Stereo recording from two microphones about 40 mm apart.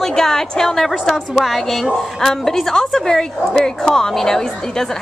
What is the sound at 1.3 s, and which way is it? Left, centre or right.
A woman's voice, centre.